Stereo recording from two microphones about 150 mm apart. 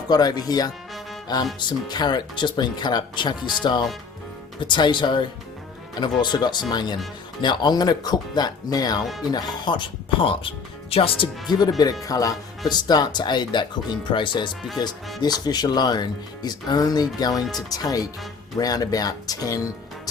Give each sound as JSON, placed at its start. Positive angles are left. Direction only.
{"t": 0.1, "sound": "speech", "side_deg": 25}
{"t": 11.5, "sound": "speech", "side_deg": 30}